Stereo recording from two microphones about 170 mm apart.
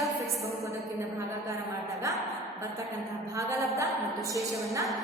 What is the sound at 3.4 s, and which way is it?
Speech, 20° right (ahead or behind).